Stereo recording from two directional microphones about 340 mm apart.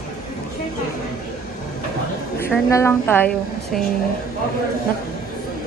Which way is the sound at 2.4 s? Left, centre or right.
Centre.